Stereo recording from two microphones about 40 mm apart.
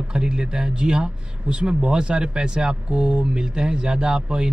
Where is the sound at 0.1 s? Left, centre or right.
Right.